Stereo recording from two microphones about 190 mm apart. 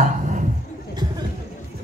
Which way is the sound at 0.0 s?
40° right (ahead or behind).